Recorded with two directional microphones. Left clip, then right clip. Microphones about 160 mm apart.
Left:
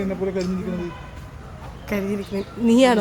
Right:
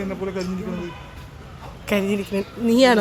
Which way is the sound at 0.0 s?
40° left (ahead or behind).